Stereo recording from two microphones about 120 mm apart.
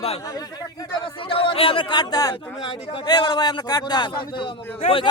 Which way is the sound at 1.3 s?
45° left (ahead or behind).